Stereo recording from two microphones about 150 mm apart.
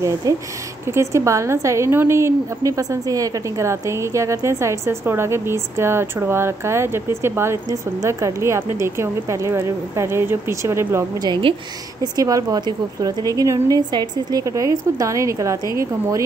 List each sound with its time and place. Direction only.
0.2 s a woman's voice: 25° right (ahead or behind)
11.2 s a woman's voice: 30° right (ahead or behind)